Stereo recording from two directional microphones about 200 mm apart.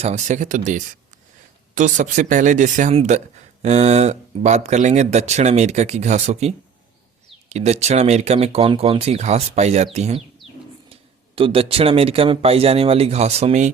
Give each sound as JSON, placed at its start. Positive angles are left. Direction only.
{"t": 0.0, "sound": "speech", "side_deg": -35}
{"t": 7.5, "sound": "speech", "side_deg": -35}
{"t": 11.3, "sound": "speech", "side_deg": -25}